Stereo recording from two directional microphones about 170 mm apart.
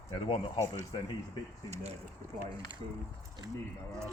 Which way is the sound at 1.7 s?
40° right (ahead or behind).